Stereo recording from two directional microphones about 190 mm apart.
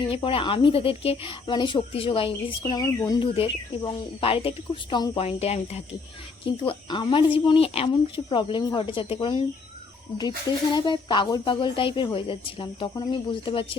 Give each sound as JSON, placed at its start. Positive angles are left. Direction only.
{"t": 0.1, "sound": "speech", "side_deg": 30}